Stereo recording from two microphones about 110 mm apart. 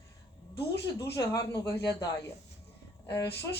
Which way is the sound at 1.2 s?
35° left (ahead or behind).